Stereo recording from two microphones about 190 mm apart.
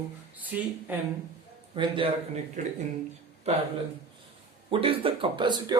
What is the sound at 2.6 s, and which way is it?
Speech, 40° right (ahead or behind).